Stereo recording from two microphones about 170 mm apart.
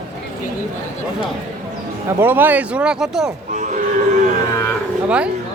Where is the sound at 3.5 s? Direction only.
45° right (ahead or behind).